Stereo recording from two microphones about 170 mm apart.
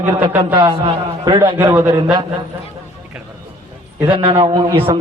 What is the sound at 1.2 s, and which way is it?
Speech, 30° right (ahead or behind).